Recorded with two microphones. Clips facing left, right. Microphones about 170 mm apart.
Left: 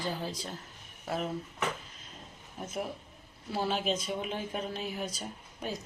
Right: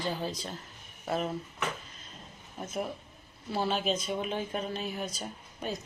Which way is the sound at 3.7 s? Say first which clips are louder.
Even; centre (ahead or behind).